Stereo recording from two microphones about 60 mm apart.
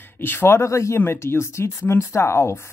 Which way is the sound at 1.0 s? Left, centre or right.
Left.